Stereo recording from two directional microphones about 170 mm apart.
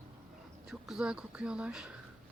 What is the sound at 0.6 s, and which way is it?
Speech, centre (ahead or behind).